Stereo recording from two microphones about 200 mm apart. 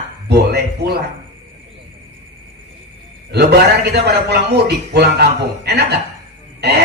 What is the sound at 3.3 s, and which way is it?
Speech, 55° right (ahead or behind).